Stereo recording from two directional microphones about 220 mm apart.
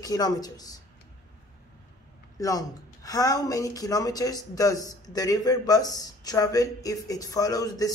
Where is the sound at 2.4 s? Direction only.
15° left (ahead or behind).